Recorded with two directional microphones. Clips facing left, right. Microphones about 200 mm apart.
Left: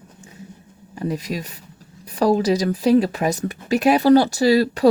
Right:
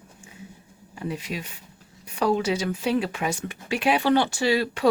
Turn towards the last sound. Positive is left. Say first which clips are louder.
# left 7 dB
turn(degrees=35)  # may be behind; listen again after turning